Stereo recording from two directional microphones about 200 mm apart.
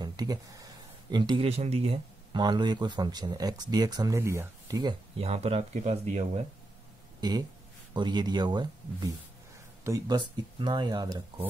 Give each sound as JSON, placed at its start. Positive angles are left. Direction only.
{"t": 0.0, "sound": "speech", "side_deg": -20}
{"t": 7.2, "sound": "speech", "side_deg": -20}